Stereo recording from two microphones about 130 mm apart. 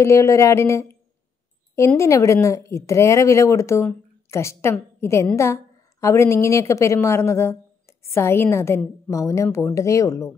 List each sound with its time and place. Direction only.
0.0 s speech: 25° left (ahead or behind)
2.0 s speech: 25° left (ahead or behind)